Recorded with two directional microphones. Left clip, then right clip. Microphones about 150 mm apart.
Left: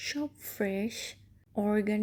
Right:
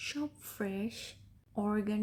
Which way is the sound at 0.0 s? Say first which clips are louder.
Left 3 dB; 20° left (ahead or behind).